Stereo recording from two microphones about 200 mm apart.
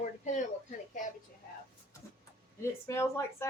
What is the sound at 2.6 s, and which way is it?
Speech, 15° left (ahead or behind).